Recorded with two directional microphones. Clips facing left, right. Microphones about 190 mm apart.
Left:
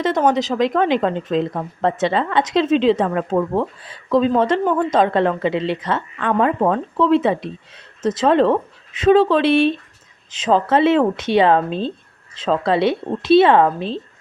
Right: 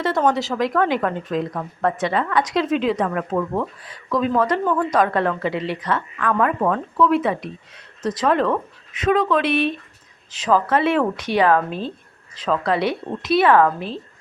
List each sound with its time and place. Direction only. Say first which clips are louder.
0.0 s a woman's voice: left 2 dB; 20° left (ahead or behind)